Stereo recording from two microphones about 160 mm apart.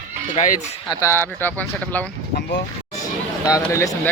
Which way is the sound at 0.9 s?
15° left (ahead or behind).